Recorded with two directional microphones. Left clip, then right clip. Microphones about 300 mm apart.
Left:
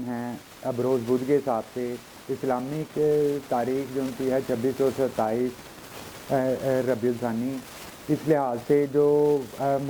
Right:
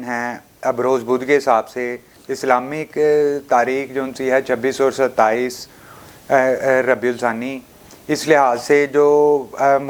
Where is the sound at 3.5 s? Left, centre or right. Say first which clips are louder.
Right 10 dB; centre.